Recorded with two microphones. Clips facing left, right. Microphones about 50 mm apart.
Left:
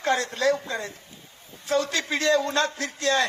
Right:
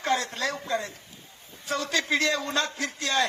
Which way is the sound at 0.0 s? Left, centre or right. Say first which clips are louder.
Left 4 dB; left.